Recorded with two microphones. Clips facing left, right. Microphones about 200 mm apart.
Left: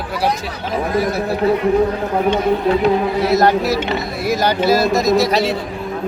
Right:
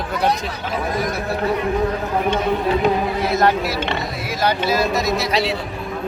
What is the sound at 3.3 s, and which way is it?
Speech, 40° left (ahead or behind).